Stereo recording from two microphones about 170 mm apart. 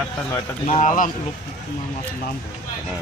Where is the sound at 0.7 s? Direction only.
45° left (ahead or behind).